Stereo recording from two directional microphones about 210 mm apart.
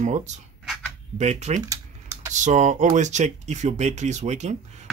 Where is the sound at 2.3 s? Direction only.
35° right (ahead or behind).